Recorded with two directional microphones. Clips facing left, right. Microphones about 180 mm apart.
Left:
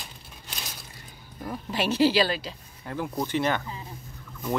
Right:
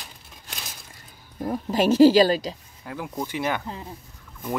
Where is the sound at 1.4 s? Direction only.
40° right (ahead or behind).